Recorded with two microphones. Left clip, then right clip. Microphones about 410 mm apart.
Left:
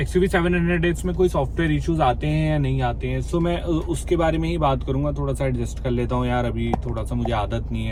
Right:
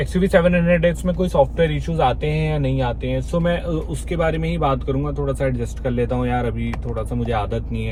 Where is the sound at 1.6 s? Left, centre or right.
Centre.